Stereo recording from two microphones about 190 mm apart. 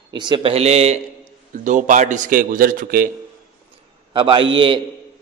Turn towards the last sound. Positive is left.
turn(degrees=-25)  # may be behind; listen again after turning